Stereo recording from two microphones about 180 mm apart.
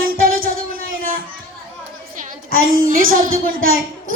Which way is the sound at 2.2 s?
50° right (ahead or behind).